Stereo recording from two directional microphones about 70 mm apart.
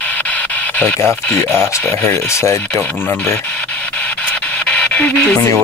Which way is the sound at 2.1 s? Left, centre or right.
Left.